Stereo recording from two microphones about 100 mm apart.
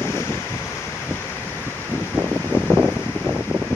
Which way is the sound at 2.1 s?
15° right (ahead or behind).